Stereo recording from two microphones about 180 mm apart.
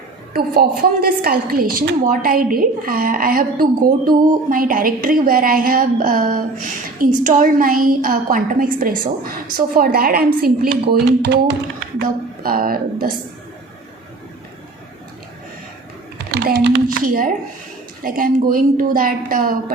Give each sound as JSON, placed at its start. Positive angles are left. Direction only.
{"t": 0.3, "sound": "a woman's voice", "side_deg": -55}
{"t": 11.9, "sound": "a woman's voice", "side_deg": -55}
{"t": 16.3, "sound": "speech", "side_deg": -65}
{"t": 17.0, "sound": "a woman's voice", "side_deg": -50}